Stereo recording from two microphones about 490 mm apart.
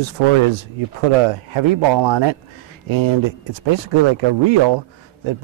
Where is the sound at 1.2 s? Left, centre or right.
Right.